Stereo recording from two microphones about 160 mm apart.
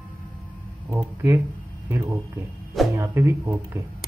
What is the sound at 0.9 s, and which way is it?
Speech, 20° right (ahead or behind).